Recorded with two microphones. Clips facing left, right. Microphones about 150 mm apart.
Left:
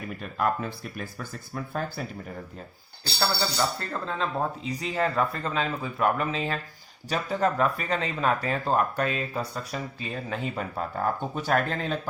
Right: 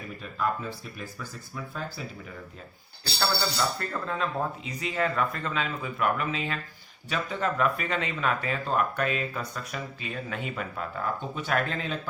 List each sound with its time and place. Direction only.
0.2 s speech: 60° left (ahead or behind)
3.8 s speech: 30° left (ahead or behind)